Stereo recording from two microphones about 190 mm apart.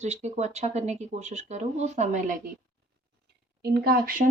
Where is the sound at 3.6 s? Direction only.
55° right (ahead or behind).